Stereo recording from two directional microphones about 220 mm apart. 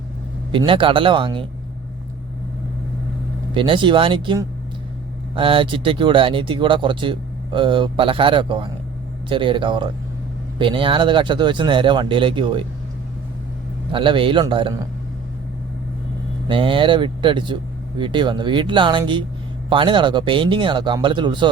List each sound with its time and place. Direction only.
0.5 s speech: 25° right (ahead or behind)
3.5 s speech: 20° right (ahead or behind)
13.9 s speech: 25° right (ahead or behind)
16.5 s speech: 25° right (ahead or behind)